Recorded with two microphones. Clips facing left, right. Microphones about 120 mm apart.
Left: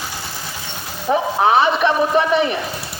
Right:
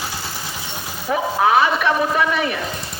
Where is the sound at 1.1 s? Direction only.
25° left (ahead or behind).